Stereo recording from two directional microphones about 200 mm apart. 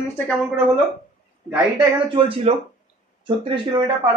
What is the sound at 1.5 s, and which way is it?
Speech, 20° right (ahead or behind).